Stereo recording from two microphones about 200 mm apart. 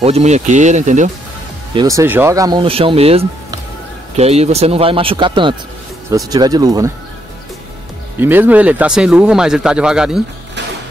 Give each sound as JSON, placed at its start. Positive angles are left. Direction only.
{"t": 0.0, "sound": "speech", "side_deg": -35}
{"t": 1.7, "sound": "speech", "side_deg": -20}
{"t": 8.2, "sound": "speech", "side_deg": -10}